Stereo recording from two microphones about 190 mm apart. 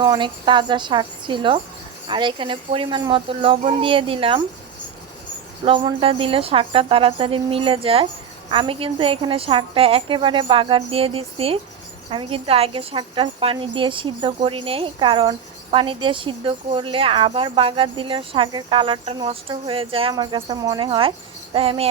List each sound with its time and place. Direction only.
0.0 s speech: 25° right (ahead or behind)
5.6 s speech: 30° right (ahead or behind)